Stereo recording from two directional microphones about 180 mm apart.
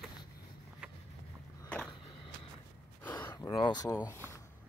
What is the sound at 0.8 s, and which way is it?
Vehicle, 5° right (ahead or behind).